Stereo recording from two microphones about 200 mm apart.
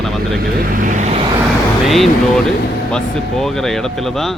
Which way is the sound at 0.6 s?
45° right (ahead or behind).